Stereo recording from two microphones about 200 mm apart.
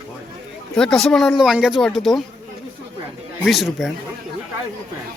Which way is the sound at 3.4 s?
Centre (ahead or behind).